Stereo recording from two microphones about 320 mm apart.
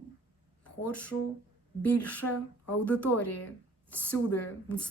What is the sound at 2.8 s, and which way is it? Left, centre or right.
A woman's voice, centre.